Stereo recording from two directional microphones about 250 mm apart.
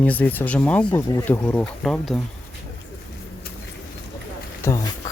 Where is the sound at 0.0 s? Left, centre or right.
Centre.